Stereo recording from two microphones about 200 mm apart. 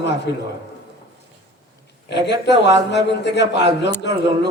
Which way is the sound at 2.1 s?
60° left (ahead or behind).